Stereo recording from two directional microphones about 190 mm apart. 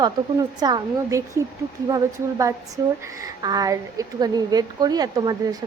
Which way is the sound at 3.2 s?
20° right (ahead or behind).